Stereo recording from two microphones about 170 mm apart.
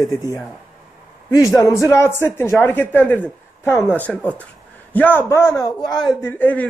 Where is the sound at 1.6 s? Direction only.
15° left (ahead or behind).